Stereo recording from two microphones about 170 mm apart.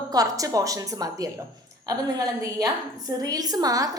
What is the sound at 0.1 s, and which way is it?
A woman's voice, 20° right (ahead or behind).